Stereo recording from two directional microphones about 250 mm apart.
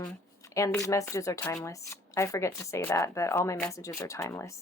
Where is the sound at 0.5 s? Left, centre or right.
Centre.